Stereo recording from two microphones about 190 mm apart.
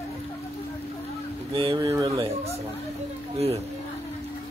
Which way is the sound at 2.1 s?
30° right (ahead or behind).